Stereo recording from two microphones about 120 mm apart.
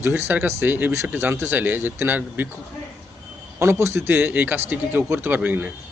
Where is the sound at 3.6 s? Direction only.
20° right (ahead or behind).